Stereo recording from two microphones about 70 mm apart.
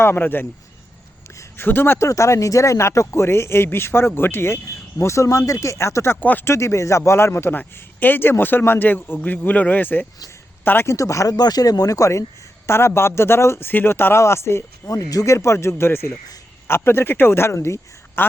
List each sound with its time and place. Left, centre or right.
0.0 s speech: left
1.5 s speech: left
2.0 s speech: left
6.1 s a man's voice: left
6.4 s a man's voice: left
10.9 s speech: left
11.3 s speech: left
12.6 s speech: left
14.8 s a man's voice: left